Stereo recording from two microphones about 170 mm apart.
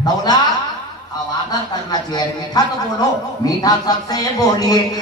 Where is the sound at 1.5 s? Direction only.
25° left (ahead or behind).